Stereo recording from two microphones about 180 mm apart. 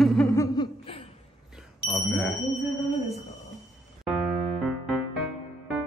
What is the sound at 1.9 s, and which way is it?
Smoke detector, centre (ahead or behind).